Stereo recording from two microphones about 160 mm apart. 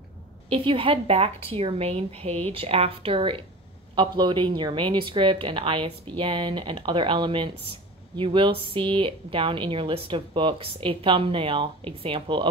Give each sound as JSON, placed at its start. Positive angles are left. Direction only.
{"t": 0.5, "sound": "speech", "side_deg": -35}